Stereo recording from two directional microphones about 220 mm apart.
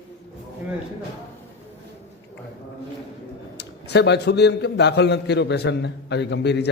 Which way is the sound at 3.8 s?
50° left (ahead or behind).